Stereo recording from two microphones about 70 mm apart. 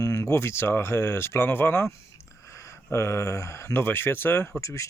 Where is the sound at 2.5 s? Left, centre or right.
Left.